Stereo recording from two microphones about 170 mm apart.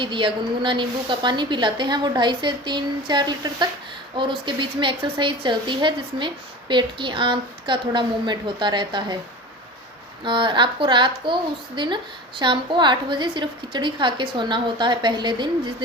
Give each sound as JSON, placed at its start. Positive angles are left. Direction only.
{"t": 0.0, "sound": "speech", "side_deg": -30}
{"t": 10.2, "sound": "speech", "side_deg": -30}